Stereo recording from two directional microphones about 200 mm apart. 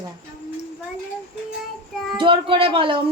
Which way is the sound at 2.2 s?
25° right (ahead or behind).